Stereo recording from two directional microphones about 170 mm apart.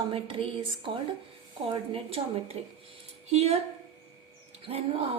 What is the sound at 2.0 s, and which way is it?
A woman's voice, 35° right (ahead or behind).